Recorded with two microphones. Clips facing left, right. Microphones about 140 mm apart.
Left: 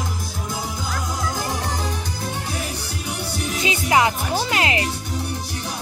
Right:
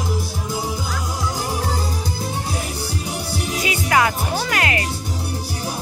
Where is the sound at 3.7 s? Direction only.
20° left (ahead or behind).